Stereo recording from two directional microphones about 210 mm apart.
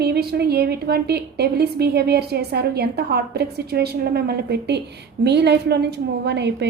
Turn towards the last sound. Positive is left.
turn(degrees=-55)  # may be behind; listen again after turning